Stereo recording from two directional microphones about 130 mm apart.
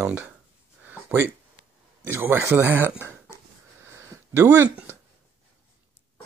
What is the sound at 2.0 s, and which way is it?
Speech, 15° right (ahead or behind).